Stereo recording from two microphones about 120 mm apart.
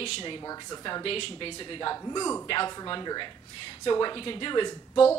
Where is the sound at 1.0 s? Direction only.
50° left (ahead or behind); by 2.4 s 30° left (ahead or behind).